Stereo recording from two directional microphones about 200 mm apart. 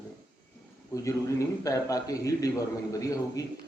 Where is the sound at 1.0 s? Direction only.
15° left (ahead or behind).